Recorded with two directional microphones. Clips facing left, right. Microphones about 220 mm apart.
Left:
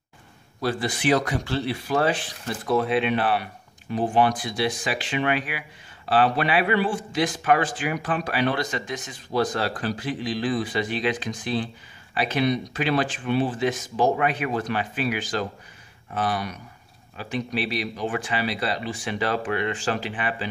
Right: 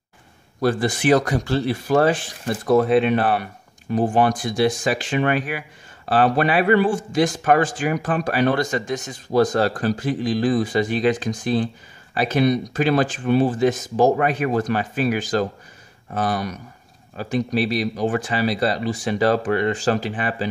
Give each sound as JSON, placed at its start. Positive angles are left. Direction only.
{"t": 0.6, "sound": "speech", "side_deg": -50}